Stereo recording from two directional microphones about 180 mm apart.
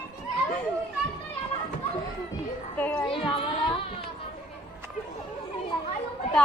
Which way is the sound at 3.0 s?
30° left (ahead or behind).